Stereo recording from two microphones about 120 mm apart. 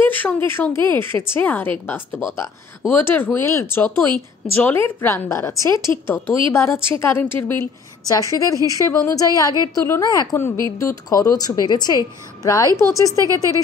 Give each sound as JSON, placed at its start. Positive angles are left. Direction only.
{"t": 0.0, "sound": "a woman's voice", "side_deg": 15}
{"t": 8.1, "sound": "a woman's voice", "side_deg": 30}
{"t": 13.2, "sound": "speech", "side_deg": -30}